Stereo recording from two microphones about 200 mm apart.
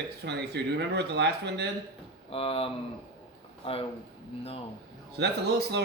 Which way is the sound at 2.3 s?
30° left (ahead or behind).